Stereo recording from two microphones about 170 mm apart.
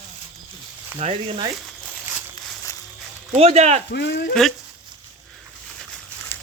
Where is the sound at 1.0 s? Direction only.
35° right (ahead or behind).